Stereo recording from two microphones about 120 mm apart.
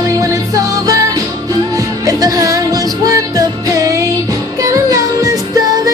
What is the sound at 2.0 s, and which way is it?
Music, 30° right (ahead or behind).